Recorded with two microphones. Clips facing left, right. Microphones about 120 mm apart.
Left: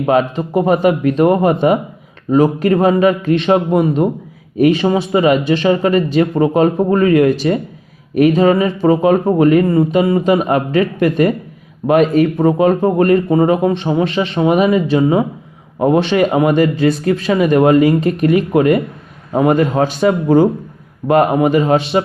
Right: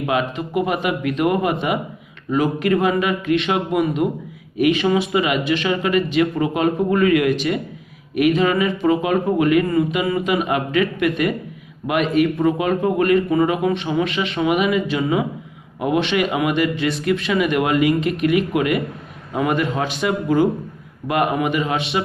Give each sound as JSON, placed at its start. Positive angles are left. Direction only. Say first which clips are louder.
{"t": 0.0, "sound": "speech", "louder": "left 7 dB", "side_deg": 35}
{"t": 12.5, "sound": "speech", "louder": "left 6 dB", "side_deg": 35}